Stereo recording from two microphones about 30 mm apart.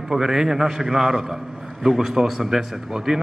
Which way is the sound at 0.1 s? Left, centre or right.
Centre.